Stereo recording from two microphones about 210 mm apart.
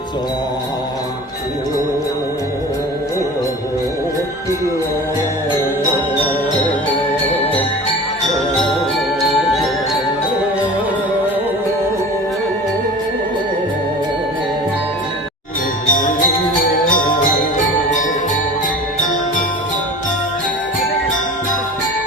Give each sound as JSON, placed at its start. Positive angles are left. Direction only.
{"t": 6.9, "sound": "jingle bell", "side_deg": 10}
{"t": 15.9, "sound": "music", "side_deg": 40}